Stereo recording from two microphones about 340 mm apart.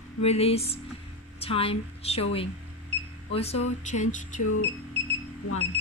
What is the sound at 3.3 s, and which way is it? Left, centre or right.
Music, centre.